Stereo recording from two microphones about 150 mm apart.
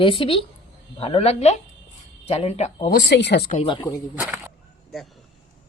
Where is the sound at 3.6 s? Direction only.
25° left (ahead or behind).